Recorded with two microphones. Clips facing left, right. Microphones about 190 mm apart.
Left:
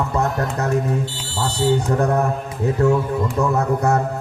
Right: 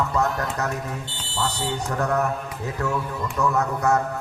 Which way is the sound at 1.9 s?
30° left (ahead or behind).